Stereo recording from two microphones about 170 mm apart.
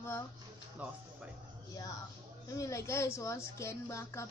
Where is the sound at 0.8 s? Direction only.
10° right (ahead or behind).